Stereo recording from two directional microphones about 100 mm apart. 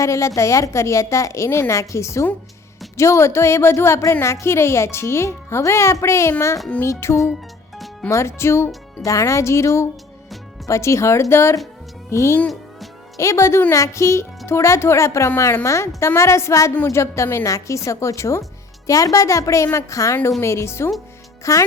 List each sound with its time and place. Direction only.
0.0 s a woman's voice: 30° left (ahead or behind)
8.4 s a woman's voice: 25° left (ahead or behind)